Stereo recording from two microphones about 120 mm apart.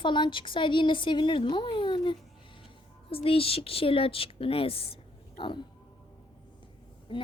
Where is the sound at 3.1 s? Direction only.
50° left (ahead or behind).